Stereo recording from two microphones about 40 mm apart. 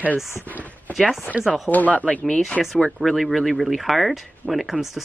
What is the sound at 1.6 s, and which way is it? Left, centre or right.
Speech, left.